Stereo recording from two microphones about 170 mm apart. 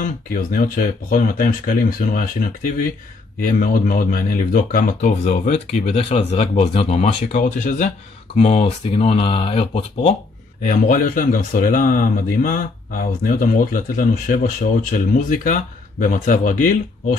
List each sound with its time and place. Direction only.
0.0 s speech: 55° left (ahead or behind)
3.3 s speech: 50° left (ahead or behind); by 10.1 s 35° left (ahead or behind)
10.6 s speech: 50° left (ahead or behind)